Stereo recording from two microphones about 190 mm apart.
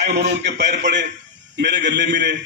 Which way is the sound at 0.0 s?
60° right (ahead or behind).